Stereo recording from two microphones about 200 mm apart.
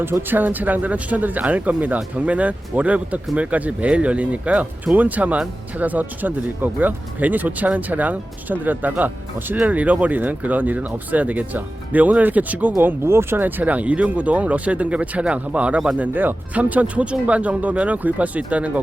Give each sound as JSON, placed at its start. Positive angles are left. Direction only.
{"t": 0.0, "sound": "speech", "side_deg": -10}